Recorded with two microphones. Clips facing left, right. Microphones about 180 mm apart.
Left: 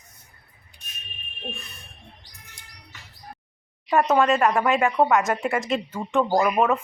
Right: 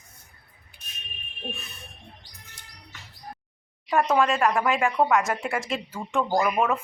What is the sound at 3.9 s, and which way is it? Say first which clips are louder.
Speech: left 3 dB; 5° left (ahead or behind).